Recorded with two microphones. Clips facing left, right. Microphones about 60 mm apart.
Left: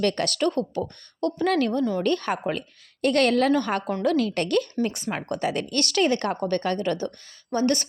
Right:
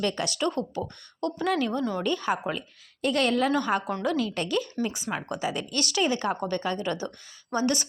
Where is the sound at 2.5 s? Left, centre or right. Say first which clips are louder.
Left 4 dB; left.